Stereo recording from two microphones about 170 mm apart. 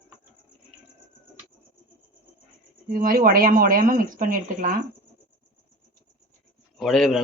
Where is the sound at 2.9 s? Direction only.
55° right (ahead or behind).